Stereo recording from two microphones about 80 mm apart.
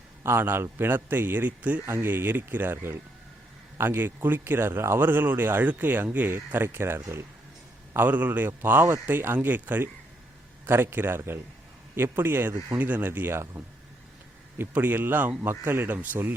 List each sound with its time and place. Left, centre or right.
0.2 s speech: right
7.9 s speech: right
14.6 s speech: right